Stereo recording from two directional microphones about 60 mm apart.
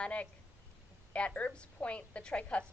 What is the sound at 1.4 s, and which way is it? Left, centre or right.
A woman's voice, left.